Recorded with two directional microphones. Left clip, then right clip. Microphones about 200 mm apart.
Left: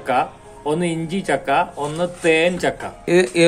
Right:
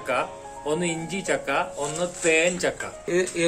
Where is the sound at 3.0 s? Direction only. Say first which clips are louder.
Left 9 dB; 60° left (ahead or behind).